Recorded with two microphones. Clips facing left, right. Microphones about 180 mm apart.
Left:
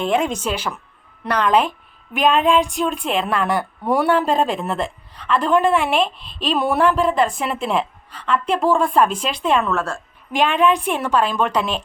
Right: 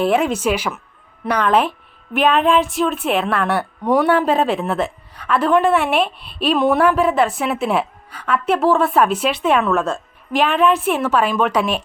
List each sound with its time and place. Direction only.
0.0 s speech: 5° right (ahead or behind)
9.7 s a woman's voice: 20° right (ahead or behind)
10.3 s speech: 5° right (ahead or behind)